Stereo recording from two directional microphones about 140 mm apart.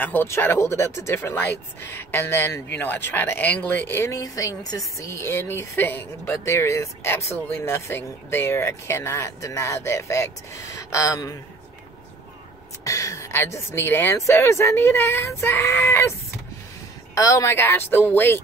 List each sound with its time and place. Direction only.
0.0 s speech: 15° left (ahead or behind)
12.8 s speech: 25° left (ahead or behind)